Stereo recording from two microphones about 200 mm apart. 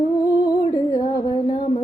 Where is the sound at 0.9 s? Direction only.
20° left (ahead or behind).